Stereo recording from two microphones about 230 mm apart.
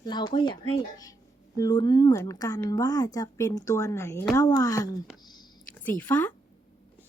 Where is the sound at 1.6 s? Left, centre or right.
Centre.